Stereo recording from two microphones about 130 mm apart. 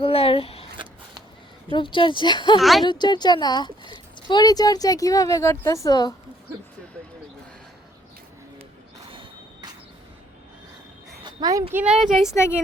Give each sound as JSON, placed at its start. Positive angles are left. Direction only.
{"t": 0.0, "sound": "a sound", "side_deg": 45}
{"t": 1.7, "sound": "speech", "side_deg": 40}
{"t": 2.6, "sound": "speech", "side_deg": 0}
{"t": 2.8, "sound": "speech", "side_deg": 35}
{"t": 11.3, "sound": "a sound", "side_deg": -30}
{"t": 11.7, "sound": "speech", "side_deg": -10}
{"t": 12.2, "sound": "speech", "side_deg": 20}